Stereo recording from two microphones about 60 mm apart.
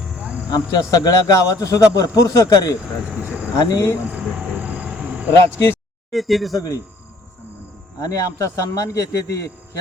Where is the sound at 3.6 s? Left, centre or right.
Left.